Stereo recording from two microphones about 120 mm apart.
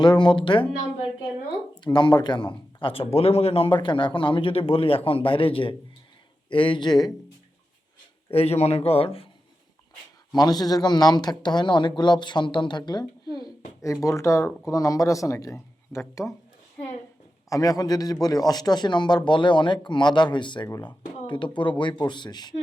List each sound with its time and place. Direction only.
0.0 s a man's voice: 40° left (ahead or behind)
1.8 s a man's voice: 40° left (ahead or behind); by 3.8 s 55° left (ahead or behind)
3.8 s a man's voice: 40° left (ahead or behind)
8.3 s speech: 55° left (ahead or behind)
10.3 s a man's voice: 35° left (ahead or behind)
13.3 s a sound: 35° left (ahead or behind)
14.0 s speech: 25° left (ahead or behind)
17.5 s a man's voice: 30° left (ahead or behind)